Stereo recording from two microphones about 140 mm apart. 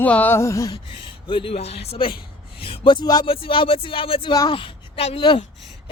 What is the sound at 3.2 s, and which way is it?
Speech, 40° left (ahead or behind).